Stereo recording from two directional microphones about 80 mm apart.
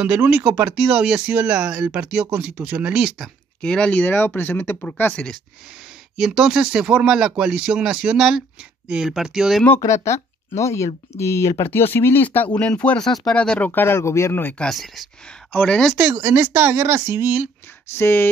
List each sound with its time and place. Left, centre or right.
0.0 s speech: centre
3.6 s speech: centre
5.1 s speech: centre
6.1 s speech: centre
9.8 s speech: left
12.4 s speech: centre
13.7 s speech: left
14.7 s speech: centre
15.2 s speech: centre
16.0 s speech: right
17.9 s speech: left